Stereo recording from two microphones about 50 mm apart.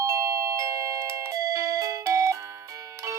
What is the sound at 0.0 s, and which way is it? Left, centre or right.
Doorbell, right.